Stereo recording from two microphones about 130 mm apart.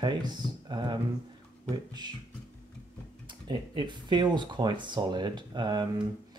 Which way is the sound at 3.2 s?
35° right (ahead or behind).